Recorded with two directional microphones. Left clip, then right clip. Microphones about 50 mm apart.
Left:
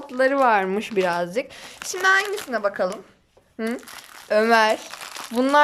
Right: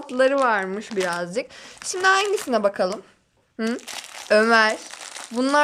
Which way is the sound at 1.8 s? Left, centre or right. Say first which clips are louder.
Even; left.